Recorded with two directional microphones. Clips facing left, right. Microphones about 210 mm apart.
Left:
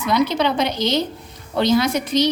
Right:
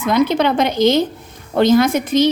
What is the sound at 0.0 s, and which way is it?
A woman's voice, 50° right (ahead or behind).